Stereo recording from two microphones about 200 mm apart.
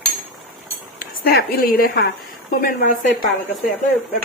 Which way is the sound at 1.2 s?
50° left (ahead or behind).